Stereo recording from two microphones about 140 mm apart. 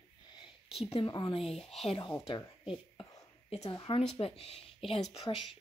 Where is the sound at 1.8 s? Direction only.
40° left (ahead or behind).